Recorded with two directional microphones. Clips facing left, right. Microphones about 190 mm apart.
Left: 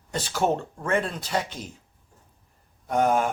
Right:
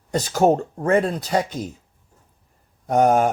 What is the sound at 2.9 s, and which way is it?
Speech, 45° right (ahead or behind).